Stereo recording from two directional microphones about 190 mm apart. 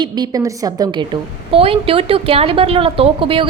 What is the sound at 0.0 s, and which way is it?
A woman's voice, 20° right (ahead or behind).